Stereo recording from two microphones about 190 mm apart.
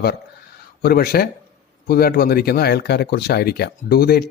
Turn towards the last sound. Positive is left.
turn(degrees=55)  # may be behind; listen again after turning